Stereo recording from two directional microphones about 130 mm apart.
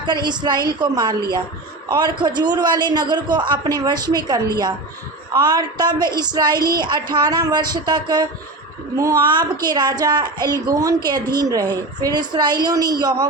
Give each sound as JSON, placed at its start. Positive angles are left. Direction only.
{"t": 0.0, "sound": "a woman's voice", "side_deg": -35}
{"t": 9.6, "sound": "a woman's voice", "side_deg": -35}